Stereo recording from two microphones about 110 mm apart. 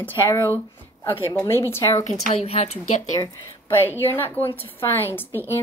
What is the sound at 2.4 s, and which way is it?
Speech, 70° left (ahead or behind).